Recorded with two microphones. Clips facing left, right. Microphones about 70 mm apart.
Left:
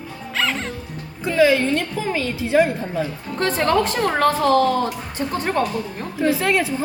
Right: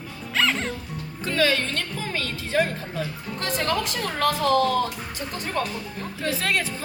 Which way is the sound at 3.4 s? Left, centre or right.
Left.